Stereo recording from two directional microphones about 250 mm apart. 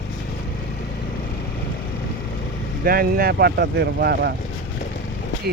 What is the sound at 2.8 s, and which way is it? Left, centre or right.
Speech, right.